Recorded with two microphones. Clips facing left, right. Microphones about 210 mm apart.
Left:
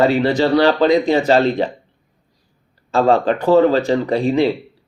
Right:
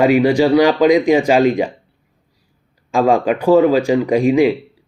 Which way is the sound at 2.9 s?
10° right (ahead or behind).